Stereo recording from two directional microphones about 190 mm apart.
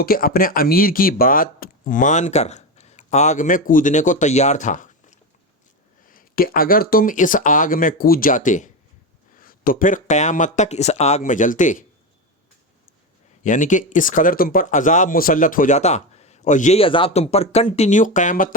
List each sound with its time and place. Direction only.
0.0 s speech: 50° left (ahead or behind)
13.4 s speech: 40° left (ahead or behind)